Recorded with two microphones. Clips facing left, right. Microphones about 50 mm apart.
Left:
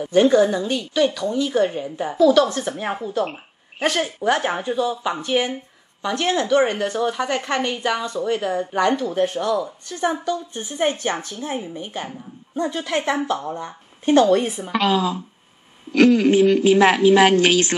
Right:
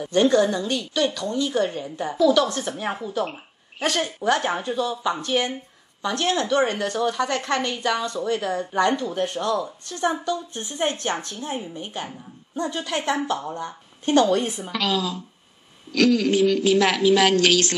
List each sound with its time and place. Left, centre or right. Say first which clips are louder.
0.0 s a woman's voice: left 3 dB; centre
14.7 s a woman's voice: left 7 dB; left